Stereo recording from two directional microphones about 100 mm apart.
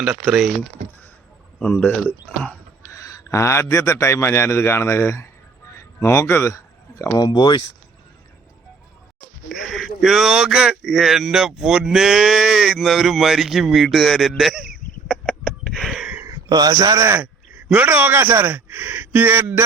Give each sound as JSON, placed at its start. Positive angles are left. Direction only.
{"t": 0.0, "sound": "speech", "side_deg": -5}
{"t": 1.7, "sound": "speech", "side_deg": 15}
{"t": 2.9, "sound": "a man's voice", "side_deg": 35}
{"t": 7.3, "sound": "speech", "side_deg": 50}
{"t": 9.5, "sound": "speech", "side_deg": 5}
{"t": 16.2, "sound": "speech", "side_deg": -40}
{"t": 17.2, "sound": "speech", "side_deg": -15}